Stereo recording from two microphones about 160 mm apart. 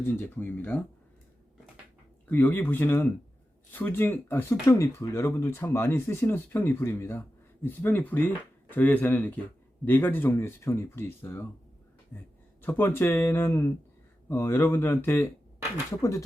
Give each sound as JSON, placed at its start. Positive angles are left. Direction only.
{"t": 0.0, "sound": "speech", "side_deg": 15}
{"t": 2.3, "sound": "speech", "side_deg": 10}
{"t": 12.6, "sound": "speech", "side_deg": 15}